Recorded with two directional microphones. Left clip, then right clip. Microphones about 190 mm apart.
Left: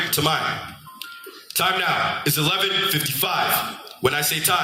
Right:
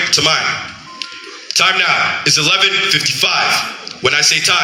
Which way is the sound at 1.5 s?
50° left (ahead or behind).